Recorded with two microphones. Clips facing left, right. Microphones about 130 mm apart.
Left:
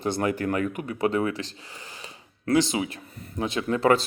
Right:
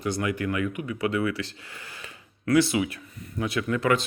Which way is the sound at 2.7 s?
30° left (ahead or behind).